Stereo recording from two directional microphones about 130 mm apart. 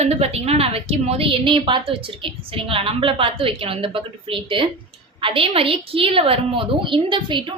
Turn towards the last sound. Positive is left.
turn(degrees=-35)  # may be behind; listen again after turning